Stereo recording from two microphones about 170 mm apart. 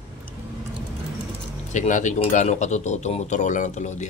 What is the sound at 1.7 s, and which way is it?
Speech, 45° left (ahead or behind).